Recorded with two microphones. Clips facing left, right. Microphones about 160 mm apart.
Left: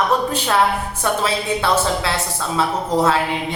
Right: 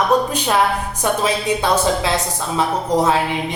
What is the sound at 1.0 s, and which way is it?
A woman's voice, 15° right (ahead or behind).